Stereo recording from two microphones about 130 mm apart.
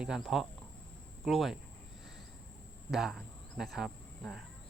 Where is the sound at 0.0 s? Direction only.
5° right (ahead or behind).